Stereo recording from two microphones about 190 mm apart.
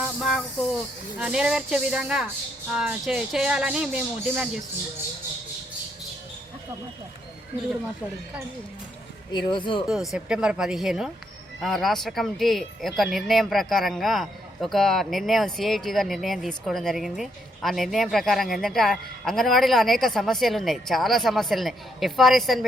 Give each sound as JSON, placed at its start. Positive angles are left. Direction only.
{"t": 0.0, "sound": "hiss", "side_deg": 0}
{"t": 1.2, "sound": "speech", "side_deg": -5}
{"t": 9.5, "sound": "speech", "side_deg": 25}
{"t": 9.8, "sound": "speech", "side_deg": 0}